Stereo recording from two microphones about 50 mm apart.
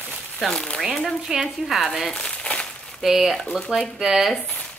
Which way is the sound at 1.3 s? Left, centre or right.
Centre.